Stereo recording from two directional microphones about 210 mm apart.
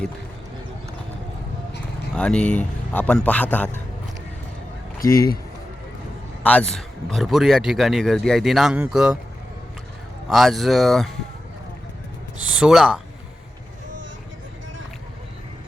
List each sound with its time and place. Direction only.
2.1 s a man's voice: 5° left (ahead or behind)
5.0 s a man's voice: 15° left (ahead or behind)
6.4 s speech: 5° left (ahead or behind)
10.2 s speech: centre (ahead or behind)
12.4 s speech: 5° right (ahead or behind)